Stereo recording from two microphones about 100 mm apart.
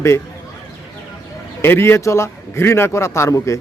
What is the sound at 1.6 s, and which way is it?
A man's voice, 25° left (ahead or behind).